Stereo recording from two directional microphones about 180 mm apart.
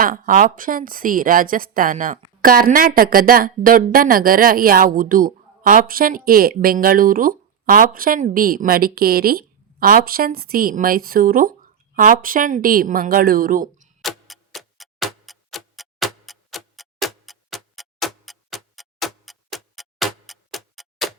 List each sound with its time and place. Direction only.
0.0 s a woman's voice: 50° right (ahead or behind)
14.0 s tick-tock: centre (ahead or behind)